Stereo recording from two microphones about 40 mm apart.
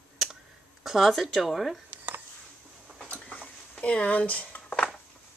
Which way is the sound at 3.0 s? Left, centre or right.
Left.